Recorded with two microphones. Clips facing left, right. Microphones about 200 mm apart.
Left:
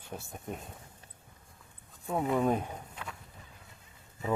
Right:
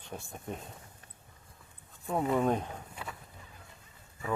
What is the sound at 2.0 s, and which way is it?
Speech, centre (ahead or behind).